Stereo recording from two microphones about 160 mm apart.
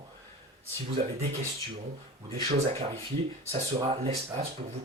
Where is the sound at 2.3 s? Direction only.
35° right (ahead or behind).